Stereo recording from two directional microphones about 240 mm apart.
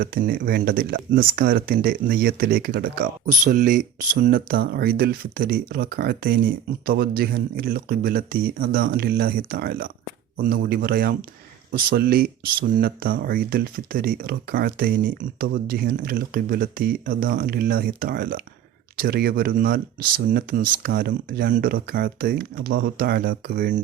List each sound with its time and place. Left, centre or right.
0.0 s speech: right